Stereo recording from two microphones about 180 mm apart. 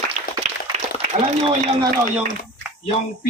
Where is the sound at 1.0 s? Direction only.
35° right (ahead or behind).